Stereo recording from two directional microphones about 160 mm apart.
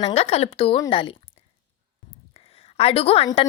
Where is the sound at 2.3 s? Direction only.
35° left (ahead or behind).